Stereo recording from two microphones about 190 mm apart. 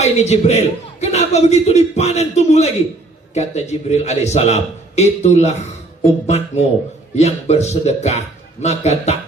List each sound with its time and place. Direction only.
0.0 s a man's voice: 35° left (ahead or behind)